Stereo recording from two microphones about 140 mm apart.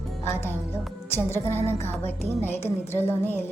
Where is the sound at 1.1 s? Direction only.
15° left (ahead or behind).